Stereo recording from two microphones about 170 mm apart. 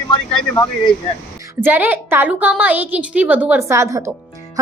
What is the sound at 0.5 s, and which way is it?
Speech, 25° left (ahead or behind).